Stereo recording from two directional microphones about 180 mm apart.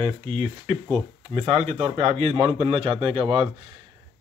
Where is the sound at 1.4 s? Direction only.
35° right (ahead or behind).